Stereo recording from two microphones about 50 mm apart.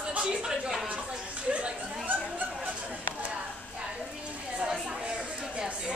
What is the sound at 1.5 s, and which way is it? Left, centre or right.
Chuckle, right.